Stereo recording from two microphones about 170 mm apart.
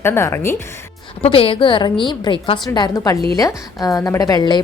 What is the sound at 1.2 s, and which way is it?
Speech, 35° left (ahead or behind).